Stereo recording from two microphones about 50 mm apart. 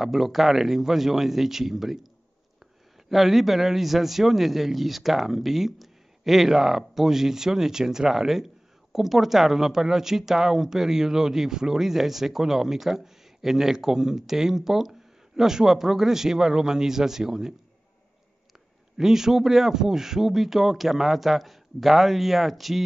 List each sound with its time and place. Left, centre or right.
0.0 s speech: centre
3.1 s speech: centre
18.9 s speech: centre